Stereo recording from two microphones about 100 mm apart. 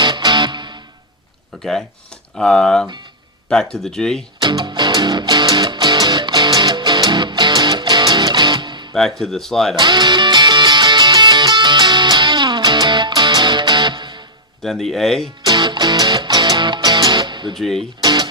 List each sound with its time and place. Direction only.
0.0 s music: 50° right (ahead or behind)
2.3 s speech: 5° left (ahead or behind)
4.4 s music: 50° right (ahead or behind)
9.0 s speech: 5° left (ahead or behind)
9.7 s music: 50° right (ahead or behind)
14.6 s speech: 5° left (ahead or behind)
15.4 s music: 50° right (ahead or behind)
17.5 s speech: 5° left (ahead or behind)
18.0 s music: 45° right (ahead or behind)